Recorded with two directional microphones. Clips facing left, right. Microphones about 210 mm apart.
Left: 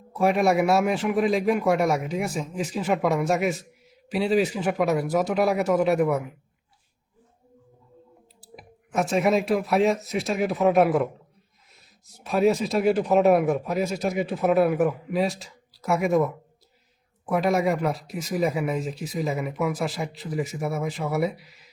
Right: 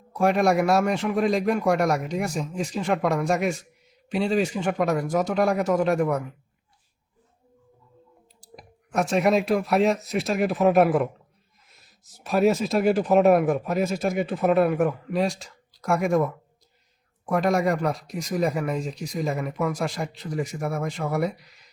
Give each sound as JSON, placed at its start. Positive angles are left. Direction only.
{"t": 0.1, "sound": "speech", "side_deg": 0}
{"t": 8.4, "sound": "speech", "side_deg": 0}